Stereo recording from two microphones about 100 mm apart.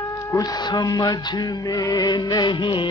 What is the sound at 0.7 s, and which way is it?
Music, 40° left (ahead or behind).